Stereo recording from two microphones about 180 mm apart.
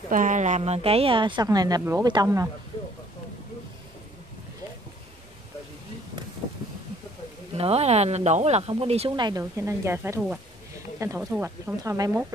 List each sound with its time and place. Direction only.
0.1 s a woman's voice: 45° right (ahead or behind); by 2.5 s 15° right (ahead or behind)
7.5 s speech: 35° right (ahead or behind); by 12.1 s 15° right (ahead or behind)